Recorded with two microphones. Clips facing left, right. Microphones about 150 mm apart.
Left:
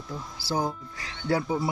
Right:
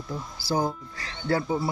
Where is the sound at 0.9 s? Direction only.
15° left (ahead or behind).